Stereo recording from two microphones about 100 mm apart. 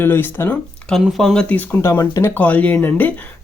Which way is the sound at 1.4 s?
15° left (ahead or behind).